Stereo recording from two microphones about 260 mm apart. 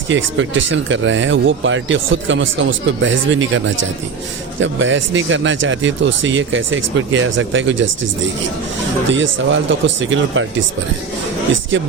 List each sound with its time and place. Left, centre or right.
0.1 s speech: right
9.1 s speech: right